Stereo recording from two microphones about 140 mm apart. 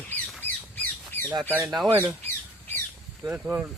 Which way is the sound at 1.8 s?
15° right (ahead or behind).